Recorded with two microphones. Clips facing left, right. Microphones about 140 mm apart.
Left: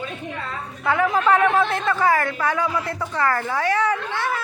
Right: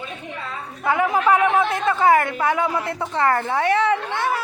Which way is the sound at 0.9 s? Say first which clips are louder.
Right 1 dB; 20° right (ahead or behind).